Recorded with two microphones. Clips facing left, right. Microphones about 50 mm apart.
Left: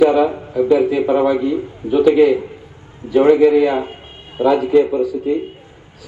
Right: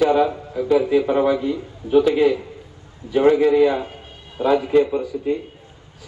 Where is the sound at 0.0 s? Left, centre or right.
Left.